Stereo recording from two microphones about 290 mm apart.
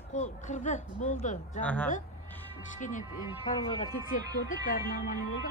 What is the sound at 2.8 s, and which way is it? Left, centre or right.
A man's voice, left.